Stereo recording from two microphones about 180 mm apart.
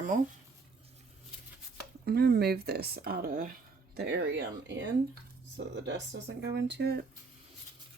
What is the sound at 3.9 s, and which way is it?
Speech, 65° right (ahead or behind).